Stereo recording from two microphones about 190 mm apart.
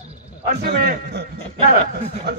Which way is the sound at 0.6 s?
55° right (ahead or behind).